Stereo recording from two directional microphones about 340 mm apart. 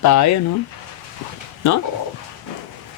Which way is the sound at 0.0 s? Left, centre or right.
Left.